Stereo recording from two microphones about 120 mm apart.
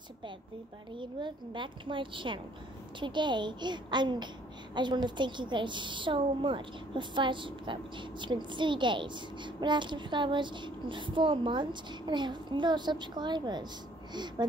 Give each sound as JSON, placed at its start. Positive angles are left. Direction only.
{"t": 0.9, "sound": "a woman's voice", "side_deg": -40}